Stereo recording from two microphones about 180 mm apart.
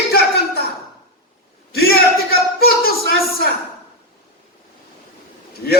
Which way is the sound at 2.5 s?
60° left (ahead or behind).